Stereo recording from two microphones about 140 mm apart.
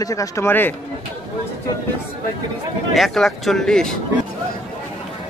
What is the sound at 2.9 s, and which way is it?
Speech, centre (ahead or behind).